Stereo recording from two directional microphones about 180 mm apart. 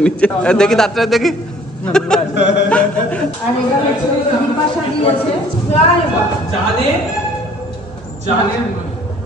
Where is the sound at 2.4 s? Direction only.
80° left.